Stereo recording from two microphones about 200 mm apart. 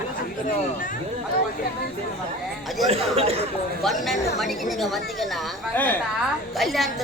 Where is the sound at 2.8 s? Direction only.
30° right (ahead or behind).